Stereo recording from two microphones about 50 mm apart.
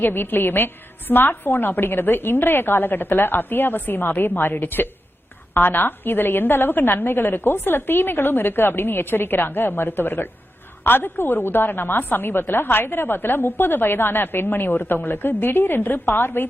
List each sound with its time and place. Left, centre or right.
0.0 s a woman's voice: left